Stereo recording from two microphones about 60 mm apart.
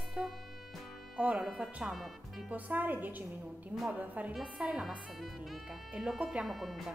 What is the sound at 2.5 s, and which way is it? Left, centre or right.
A woman's voice, right.